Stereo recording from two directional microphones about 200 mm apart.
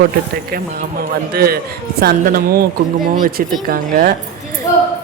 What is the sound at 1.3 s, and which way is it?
Speech, 50° right (ahead or behind).